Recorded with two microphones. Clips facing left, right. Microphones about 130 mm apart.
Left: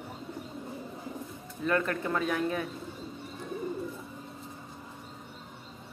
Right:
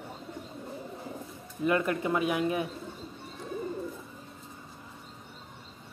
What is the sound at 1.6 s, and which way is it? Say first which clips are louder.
Speech: right 2 dB; 15° right (ahead or behind).